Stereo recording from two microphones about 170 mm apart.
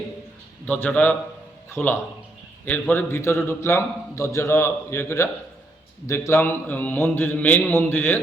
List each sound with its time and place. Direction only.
0.7 s a man's voice: 10° left (ahead or behind)